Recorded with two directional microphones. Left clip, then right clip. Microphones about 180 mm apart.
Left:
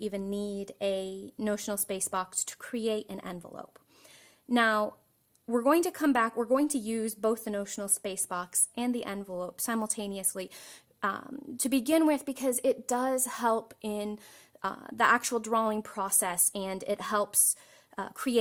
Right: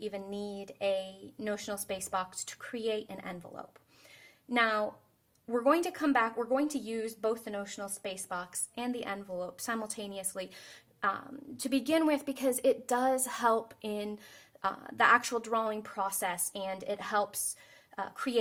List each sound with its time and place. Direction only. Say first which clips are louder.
0.0 s a woman's voice: left 4 dB; 35° left (ahead or behind)